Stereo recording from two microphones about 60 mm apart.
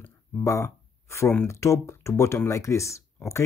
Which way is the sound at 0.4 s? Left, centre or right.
Left.